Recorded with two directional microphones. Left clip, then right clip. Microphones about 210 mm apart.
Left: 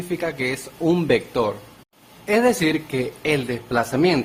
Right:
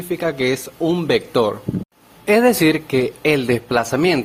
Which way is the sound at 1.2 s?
25° right (ahead or behind).